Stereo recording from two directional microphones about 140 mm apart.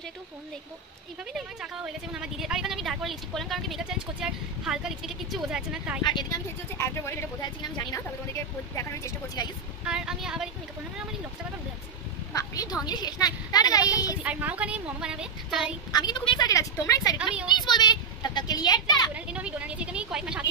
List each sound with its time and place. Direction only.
1.3 s a woman's voice: 5° right (ahead or behind)
6.8 s a woman's voice: 20° left (ahead or behind)
7.4 s a woman's voice: 30° left (ahead or behind)
9.8 s a woman's voice: 5° right (ahead or behind)
12.4 s a woman's voice: 25° left (ahead or behind)
13.9 s a woman's voice: 10° right (ahead or behind)
15.9 s a woman's voice: 30° left (ahead or behind)
19.1 s a woman's voice: 10° right (ahead or behind)